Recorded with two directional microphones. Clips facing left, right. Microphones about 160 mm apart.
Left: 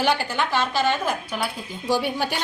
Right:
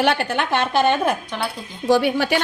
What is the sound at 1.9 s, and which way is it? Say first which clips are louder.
Speech: right 6 dB; 70° right (ahead or behind).